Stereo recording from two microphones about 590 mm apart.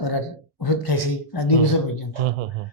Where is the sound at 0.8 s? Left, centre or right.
Left.